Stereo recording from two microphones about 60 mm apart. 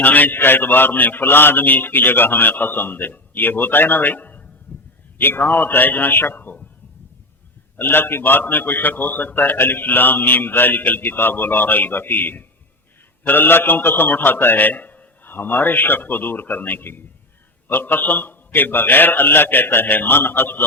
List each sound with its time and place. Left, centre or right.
0.0 s a man's voice: left
4.7 s a sound: left
5.1 s a man's voice: left
7.8 s a man's voice: left